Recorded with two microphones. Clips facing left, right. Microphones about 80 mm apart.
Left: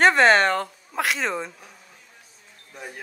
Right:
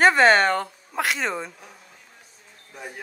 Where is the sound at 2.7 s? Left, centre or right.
Centre.